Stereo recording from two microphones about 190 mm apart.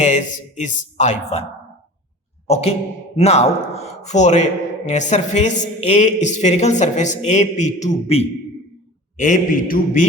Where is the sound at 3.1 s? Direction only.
35° left (ahead or behind).